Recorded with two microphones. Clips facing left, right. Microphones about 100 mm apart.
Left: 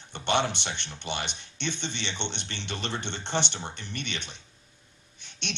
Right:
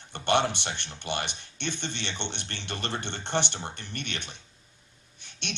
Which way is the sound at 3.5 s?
5° right (ahead or behind).